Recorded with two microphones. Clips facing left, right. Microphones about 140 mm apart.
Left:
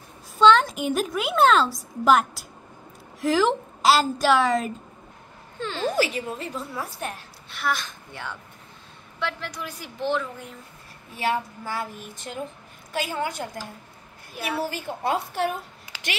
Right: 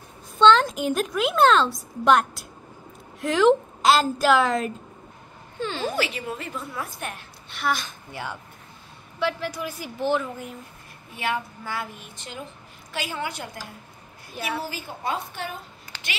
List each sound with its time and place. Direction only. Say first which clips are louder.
0.4 s a woman's voice: even; 5° left (ahead or behind)
5.9 s a woman's voice: left 3 dB; 40° left (ahead or behind)
7.4 s a woman's voice: right 1 dB; centre (ahead or behind)
11.1 s a woman's voice: left 2 dB; 40° left (ahead or behind)
14.3 s a woman's voice: even; 5° left (ahead or behind)
15.0 s a woman's voice: left 5 dB; 70° left (ahead or behind)